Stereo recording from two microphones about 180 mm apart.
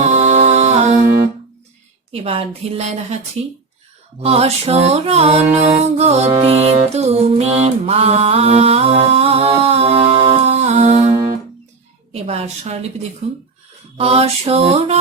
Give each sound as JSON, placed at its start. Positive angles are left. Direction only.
{"t": 0.0, "sound": "music", "side_deg": -40}
{"t": 2.1, "sound": "mantra", "side_deg": -30}
{"t": 4.2, "sound": "mantra", "side_deg": -35}
{"t": 5.5, "sound": "music", "side_deg": -40}
{"t": 12.1, "sound": "mantra", "side_deg": -35}